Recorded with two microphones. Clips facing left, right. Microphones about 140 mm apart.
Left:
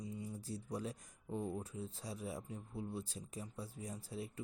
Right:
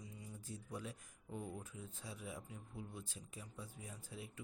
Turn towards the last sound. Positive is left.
turn(degrees=35)  # may be behind; listen again after turning